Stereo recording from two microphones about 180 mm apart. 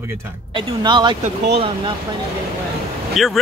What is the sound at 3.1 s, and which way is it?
Speech, centre (ahead or behind).